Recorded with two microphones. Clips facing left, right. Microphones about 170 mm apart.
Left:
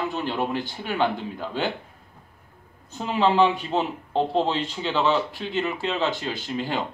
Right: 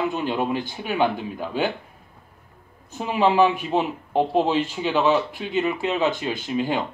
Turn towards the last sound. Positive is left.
turn(degrees=-15)  # may be behind; listen again after turning